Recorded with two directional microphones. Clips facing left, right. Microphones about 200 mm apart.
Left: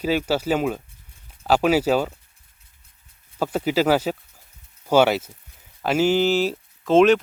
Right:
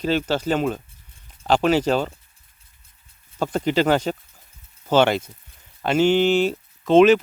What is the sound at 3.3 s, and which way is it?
Speech, 5° left (ahead or behind).